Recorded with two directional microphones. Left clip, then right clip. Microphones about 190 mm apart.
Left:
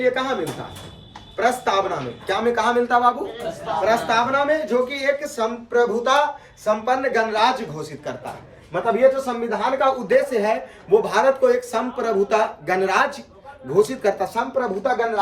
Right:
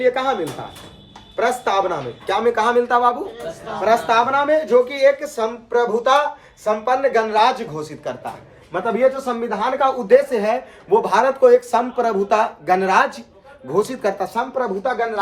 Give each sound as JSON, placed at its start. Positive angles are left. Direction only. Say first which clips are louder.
{"t": 0.0, "sound": "speech", "louder": "right 3 dB", "side_deg": -35}
{"t": 1.4, "sound": "speech", "louder": "right 1 dB", "side_deg": -35}
{"t": 8.7, "sound": "speech", "louder": "left 1 dB", "side_deg": -15}
{"t": 14.8, "sound": "speech", "louder": "left 2 dB", "side_deg": 0}